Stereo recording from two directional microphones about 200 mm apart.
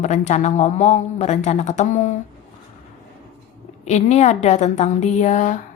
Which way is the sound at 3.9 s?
35° left (ahead or behind).